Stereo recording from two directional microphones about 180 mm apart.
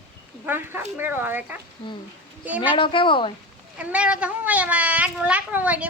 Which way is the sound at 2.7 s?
30° left (ahead or behind).